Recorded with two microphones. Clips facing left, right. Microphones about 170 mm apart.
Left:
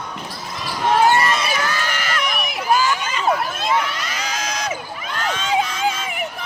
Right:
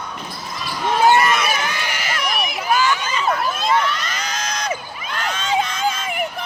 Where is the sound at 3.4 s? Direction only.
55° left (ahead or behind).